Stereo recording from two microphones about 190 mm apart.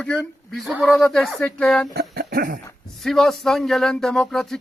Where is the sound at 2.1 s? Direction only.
50° right (ahead or behind).